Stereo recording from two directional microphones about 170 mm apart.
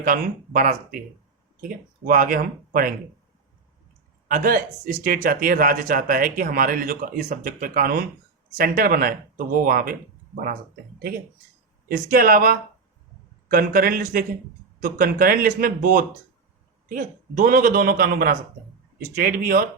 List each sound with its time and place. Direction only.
0.0 s speech: 55° right (ahead or behind)
4.3 s speech: 55° right (ahead or behind)
11.9 s speech: 60° right (ahead or behind)